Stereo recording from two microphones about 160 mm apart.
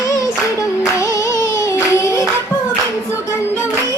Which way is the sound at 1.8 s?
20° left (ahead or behind).